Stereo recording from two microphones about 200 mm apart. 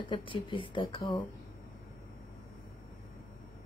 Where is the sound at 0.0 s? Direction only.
25° left (ahead or behind).